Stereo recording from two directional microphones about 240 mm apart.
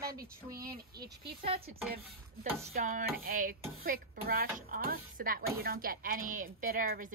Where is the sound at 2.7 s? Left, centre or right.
Right.